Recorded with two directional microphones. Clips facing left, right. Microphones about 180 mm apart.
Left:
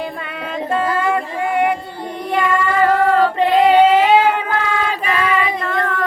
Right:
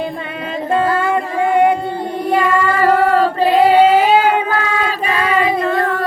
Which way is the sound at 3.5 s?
20° left (ahead or behind).